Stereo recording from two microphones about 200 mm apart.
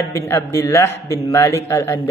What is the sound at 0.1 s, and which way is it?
Mantra, 15° left (ahead or behind).